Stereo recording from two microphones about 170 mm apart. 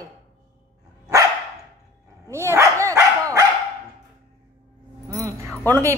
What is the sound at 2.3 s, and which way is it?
A woman's voice, 15° right (ahead or behind).